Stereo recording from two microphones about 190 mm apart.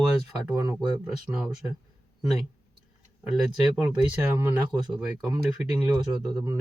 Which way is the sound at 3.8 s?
5° right (ahead or behind).